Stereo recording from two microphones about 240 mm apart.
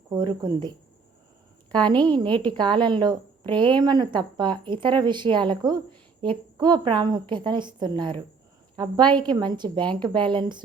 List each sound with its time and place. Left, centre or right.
0.1 s a woman's voice: centre
1.7 s a woman's voice: centre